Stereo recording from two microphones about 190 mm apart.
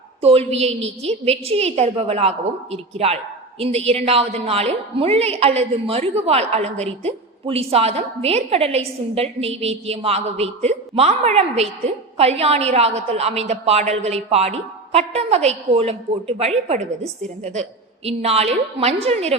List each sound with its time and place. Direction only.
0.2 s a woman's voice: 30° right (ahead or behind)